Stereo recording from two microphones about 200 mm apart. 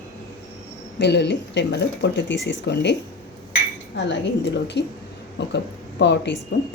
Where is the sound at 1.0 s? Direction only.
60° left (ahead or behind).